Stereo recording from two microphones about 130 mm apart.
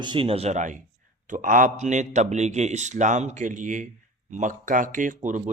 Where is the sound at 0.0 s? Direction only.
40° right (ahead or behind); by 0.8 s 65° right (ahead or behind).